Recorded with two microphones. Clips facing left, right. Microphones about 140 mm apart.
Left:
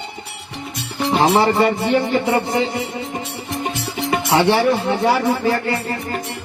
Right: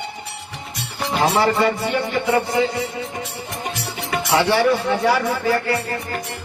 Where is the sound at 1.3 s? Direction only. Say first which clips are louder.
Left 1 dB; 30° left (ahead or behind).